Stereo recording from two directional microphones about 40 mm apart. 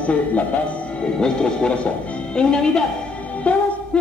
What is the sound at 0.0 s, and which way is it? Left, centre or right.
Speech, left.